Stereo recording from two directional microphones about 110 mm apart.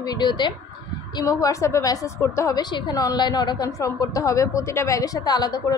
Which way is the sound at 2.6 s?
40° left (ahead or behind).